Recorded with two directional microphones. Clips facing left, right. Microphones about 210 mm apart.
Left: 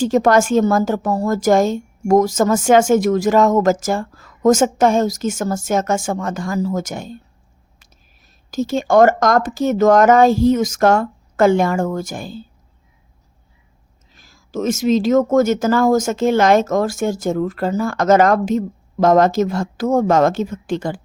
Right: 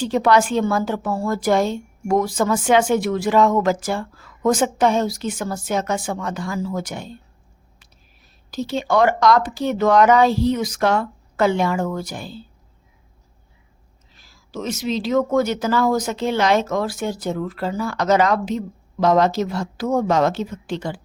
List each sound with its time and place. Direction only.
0.0 s a woman's voice: 45° left (ahead or behind)
8.4 s a woman's voice: 45° left (ahead or behind)
14.2 s a woman's voice: 45° left (ahead or behind)